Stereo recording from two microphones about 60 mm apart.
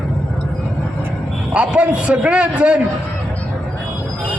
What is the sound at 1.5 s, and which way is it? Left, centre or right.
A man's voice, centre.